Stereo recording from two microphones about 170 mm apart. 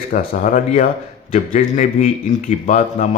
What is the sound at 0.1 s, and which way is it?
Speech, 50° left (ahead or behind).